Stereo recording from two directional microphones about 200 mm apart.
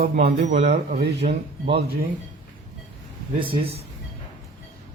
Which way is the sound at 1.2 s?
45° right (ahead or behind).